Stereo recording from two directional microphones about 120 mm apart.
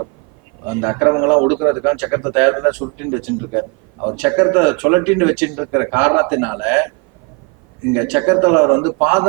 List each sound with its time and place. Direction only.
0.6 s a man's voice: 15° right (ahead or behind)